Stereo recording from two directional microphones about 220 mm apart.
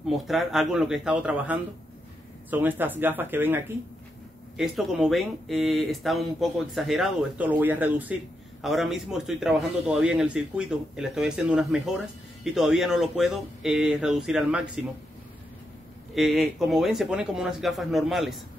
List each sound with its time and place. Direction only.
0.0 s speech: centre (ahead or behind)
16.3 s speech: centre (ahead or behind)